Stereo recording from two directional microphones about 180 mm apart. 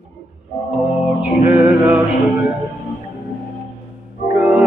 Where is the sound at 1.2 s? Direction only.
10° right (ahead or behind).